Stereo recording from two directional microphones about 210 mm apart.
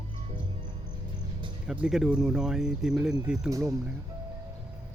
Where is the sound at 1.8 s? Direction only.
Centre (ahead or behind).